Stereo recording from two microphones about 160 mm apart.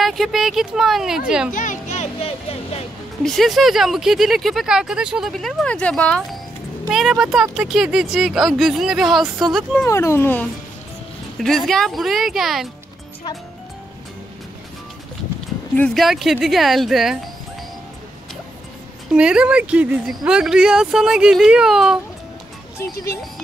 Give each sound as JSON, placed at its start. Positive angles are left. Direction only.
{"t": 0.0, "sound": "speech", "side_deg": 0}
{"t": 1.5, "sound": "speech", "side_deg": 55}
{"t": 3.3, "sound": "speech", "side_deg": 0}
{"t": 6.9, "sound": "speech", "side_deg": -5}
{"t": 9.8, "sound": "speech", "side_deg": 15}
{"t": 11.3, "sound": "speech", "side_deg": 0}
{"t": 15.7, "sound": "speech", "side_deg": 5}
{"t": 19.1, "sound": "speech", "side_deg": -5}